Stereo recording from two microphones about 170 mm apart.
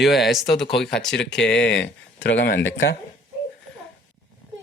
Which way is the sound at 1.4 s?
90° left.